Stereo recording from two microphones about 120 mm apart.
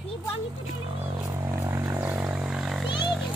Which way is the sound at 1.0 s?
25° right (ahead or behind).